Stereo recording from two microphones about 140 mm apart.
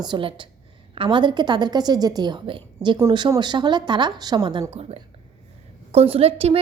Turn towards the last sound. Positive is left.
turn(degrees=-45)  # may be behind; listen again after turning